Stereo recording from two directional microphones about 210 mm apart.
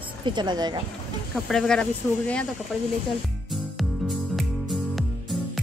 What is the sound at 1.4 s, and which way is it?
Speech, centre (ahead or behind).